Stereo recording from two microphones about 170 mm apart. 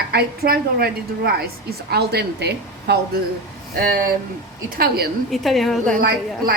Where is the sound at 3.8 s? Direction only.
55° right (ahead or behind).